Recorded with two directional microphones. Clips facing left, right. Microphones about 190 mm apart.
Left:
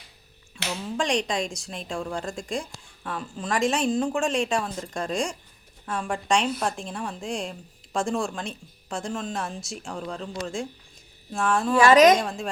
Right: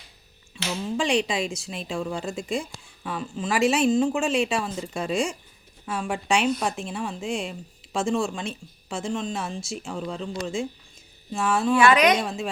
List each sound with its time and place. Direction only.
0.5 s speech: 5° right (ahead or behind)
11.8 s a woman's voice: 40° left (ahead or behind)
12.2 s speech: centre (ahead or behind)